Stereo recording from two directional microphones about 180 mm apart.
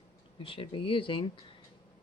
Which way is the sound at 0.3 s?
30° left (ahead or behind).